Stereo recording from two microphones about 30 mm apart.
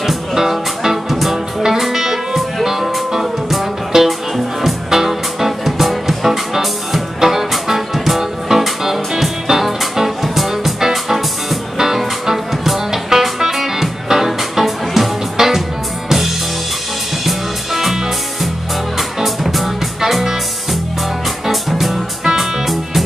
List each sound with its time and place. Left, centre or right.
0.0 s music: centre
17.3 s music: centre
18.9 s music: centre
21.5 s music: centre